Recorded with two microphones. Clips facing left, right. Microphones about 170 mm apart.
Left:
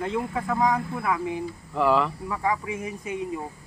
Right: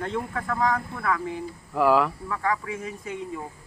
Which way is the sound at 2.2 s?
15° left (ahead or behind).